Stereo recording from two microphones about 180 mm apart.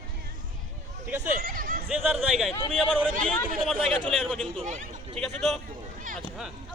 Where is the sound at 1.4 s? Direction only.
55° right (ahead or behind).